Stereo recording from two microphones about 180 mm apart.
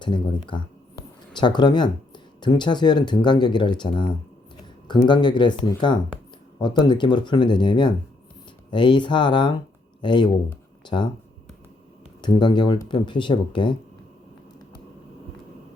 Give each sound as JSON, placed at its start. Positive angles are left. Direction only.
{"t": 0.0, "sound": "speech", "side_deg": 25}
{"t": 12.2, "sound": "speech", "side_deg": 25}